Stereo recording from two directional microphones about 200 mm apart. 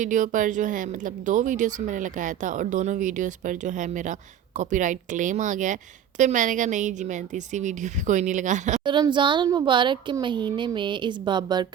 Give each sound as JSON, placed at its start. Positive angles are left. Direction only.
{"t": 0.0, "sound": "speech", "side_deg": -40}
{"t": 8.8, "sound": "a woman's voice", "side_deg": -25}